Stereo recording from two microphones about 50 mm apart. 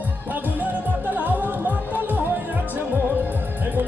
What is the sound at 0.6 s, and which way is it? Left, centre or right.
Music, right.